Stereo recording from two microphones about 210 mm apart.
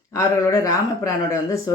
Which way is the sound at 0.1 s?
15° left (ahead or behind).